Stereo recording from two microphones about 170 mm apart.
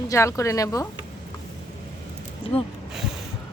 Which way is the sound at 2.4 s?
5° right (ahead or behind).